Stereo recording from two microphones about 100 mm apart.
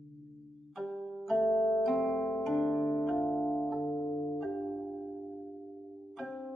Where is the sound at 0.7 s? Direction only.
Centre (ahead or behind).